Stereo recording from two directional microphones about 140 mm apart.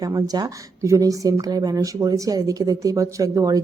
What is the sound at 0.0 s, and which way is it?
Speech, 25° right (ahead or behind).